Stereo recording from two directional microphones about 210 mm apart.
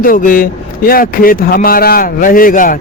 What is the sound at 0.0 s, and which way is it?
A man's voice, 40° left (ahead or behind).